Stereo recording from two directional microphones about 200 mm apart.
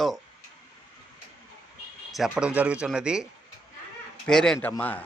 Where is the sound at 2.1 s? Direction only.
5° right (ahead or behind).